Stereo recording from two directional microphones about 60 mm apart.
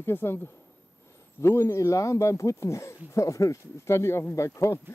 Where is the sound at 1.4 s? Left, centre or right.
Left.